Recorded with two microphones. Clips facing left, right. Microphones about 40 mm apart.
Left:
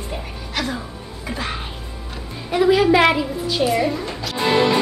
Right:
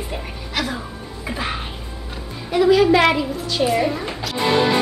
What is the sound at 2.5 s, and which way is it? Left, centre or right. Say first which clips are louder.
A woman's voice: right 1 dB; centre.